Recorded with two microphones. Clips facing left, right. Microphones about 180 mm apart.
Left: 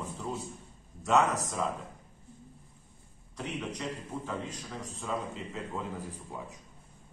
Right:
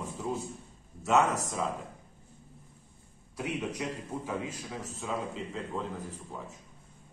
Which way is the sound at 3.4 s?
10° right (ahead or behind).